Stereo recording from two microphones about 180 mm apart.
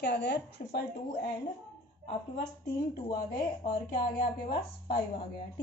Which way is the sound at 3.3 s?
25° left (ahead or behind).